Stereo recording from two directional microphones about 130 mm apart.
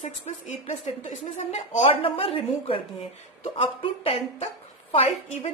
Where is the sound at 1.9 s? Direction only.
45° left (ahead or behind).